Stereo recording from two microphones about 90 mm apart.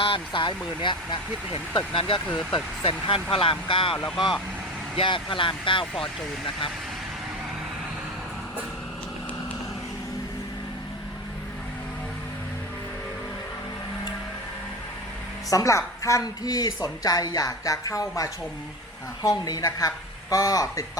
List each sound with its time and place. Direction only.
0.0 s speech: 75° left (ahead or behind)
0.8 s speech: 60° left (ahead or behind)
1.7 s speech: 75° left (ahead or behind)
4.9 s speech: 65° left (ahead or behind)
15.4 s a woman's voice: 40° left (ahead or behind)